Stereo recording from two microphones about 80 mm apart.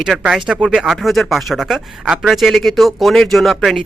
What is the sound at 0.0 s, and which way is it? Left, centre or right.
A man's voice, centre.